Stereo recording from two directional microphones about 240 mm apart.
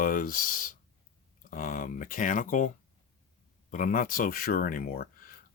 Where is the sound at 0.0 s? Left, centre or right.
Left.